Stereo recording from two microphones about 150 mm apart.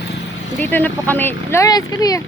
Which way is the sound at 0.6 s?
10° left (ahead or behind).